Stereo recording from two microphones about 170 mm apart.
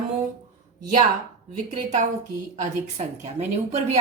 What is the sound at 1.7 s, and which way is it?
Speech, 45° right (ahead or behind).